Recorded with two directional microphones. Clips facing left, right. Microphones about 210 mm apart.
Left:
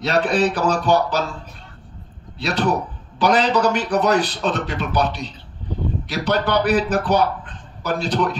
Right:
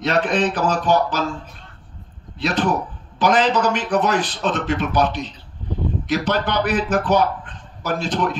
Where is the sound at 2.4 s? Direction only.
35° left (ahead or behind).